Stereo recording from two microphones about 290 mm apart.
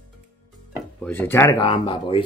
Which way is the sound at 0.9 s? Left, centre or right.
Centre.